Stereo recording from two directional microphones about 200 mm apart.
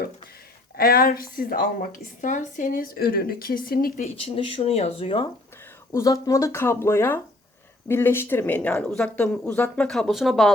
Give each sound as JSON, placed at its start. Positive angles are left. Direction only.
{"t": 0.8, "sound": "speech", "side_deg": 50}
{"t": 4.0, "sound": "speech", "side_deg": 30}